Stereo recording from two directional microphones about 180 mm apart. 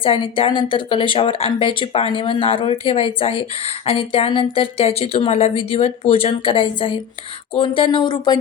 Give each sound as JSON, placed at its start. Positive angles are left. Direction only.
{"t": 0.0, "sound": "a woman's voice", "side_deg": 30}